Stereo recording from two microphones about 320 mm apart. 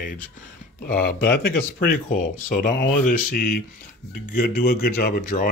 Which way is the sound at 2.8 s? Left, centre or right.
Left.